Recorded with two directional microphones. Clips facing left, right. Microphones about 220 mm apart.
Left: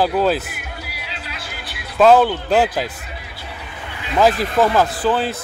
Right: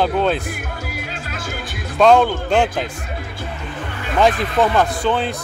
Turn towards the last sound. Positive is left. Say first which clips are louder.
# left 1 dB
turn(degrees=0)  # may be behind; listen again after turning